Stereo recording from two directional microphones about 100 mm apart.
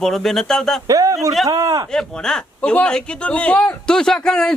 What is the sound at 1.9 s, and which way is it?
A man's voice, 5° left (ahead or behind).